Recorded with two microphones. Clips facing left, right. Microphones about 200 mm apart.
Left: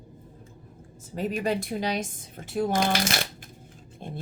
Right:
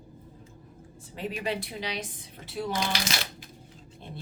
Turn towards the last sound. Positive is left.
turn(degrees=50)  # may be behind; listen again after turning